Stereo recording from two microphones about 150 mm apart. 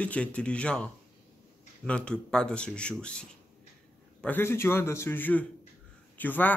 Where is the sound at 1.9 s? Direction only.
5° left (ahead or behind).